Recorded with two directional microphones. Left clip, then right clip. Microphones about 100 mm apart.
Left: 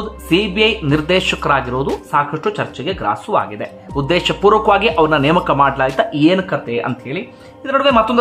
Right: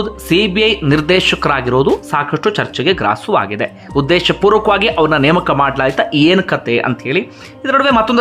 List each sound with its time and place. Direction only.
0.3 s speech: 35° right (ahead or behind); by 3.1 s 50° right (ahead or behind)
3.1 s speech: 30° right (ahead or behind)
4.7 s speech: 25° right (ahead or behind)
5.9 s speech: 45° right (ahead or behind)